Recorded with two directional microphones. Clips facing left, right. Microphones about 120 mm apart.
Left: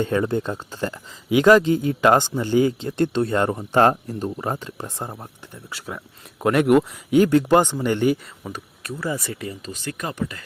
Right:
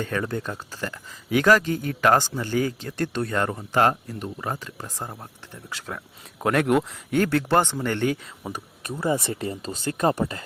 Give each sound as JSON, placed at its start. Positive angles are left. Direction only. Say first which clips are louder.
{"t": 0.0, "sound": "speech", "louder": "left 6 dB", "side_deg": 25}
{"t": 5.6, "sound": "speech", "louder": "left 1 dB", "side_deg": 5}
{"t": 8.4, "sound": "speech", "louder": "even", "side_deg": -20}